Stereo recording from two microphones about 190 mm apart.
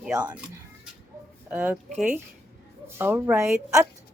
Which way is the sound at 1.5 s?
10° right (ahead or behind).